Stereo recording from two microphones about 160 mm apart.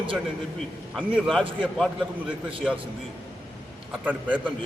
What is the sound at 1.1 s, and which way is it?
Speech, centre (ahead or behind).